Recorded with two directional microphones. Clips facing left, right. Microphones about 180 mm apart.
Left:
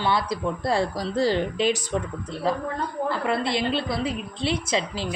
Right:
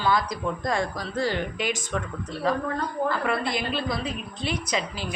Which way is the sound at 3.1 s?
25° left (ahead or behind).